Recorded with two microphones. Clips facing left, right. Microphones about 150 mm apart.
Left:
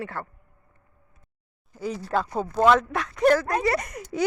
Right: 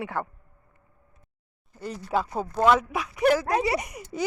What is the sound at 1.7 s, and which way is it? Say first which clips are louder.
Speech: left 1 dB; centre (ahead or behind).